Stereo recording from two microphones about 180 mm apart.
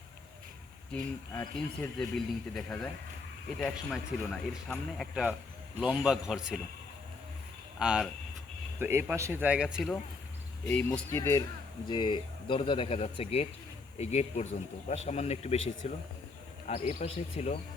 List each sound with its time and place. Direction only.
1.5 s speech: 5° left (ahead or behind)
7.8 s speech: 5° right (ahead or behind)
10.7 s speech: 10° left (ahead or behind); by 17.6 s 35° left (ahead or behind)